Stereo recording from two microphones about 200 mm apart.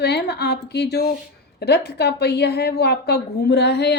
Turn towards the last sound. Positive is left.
turn(degrees=55)  # may be behind; listen again after turning